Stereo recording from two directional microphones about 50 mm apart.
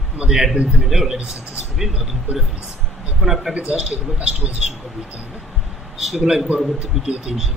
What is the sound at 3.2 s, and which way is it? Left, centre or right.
Speech, centre.